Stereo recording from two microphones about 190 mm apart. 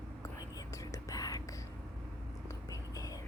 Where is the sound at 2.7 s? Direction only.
20° left (ahead or behind).